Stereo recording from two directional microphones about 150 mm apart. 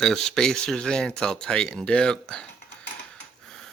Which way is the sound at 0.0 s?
5° left (ahead or behind).